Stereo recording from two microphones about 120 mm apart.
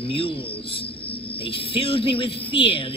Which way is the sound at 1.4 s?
50° left (ahead or behind).